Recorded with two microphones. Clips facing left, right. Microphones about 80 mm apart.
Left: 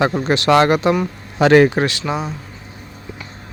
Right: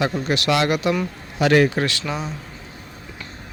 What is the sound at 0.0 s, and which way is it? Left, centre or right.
Speech, left.